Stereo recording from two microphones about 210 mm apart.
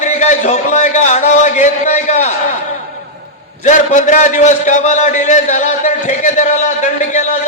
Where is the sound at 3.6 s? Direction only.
35° left (ahead or behind).